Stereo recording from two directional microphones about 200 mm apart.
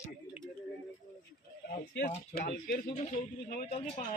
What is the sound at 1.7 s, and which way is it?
Speech, 50° left (ahead or behind).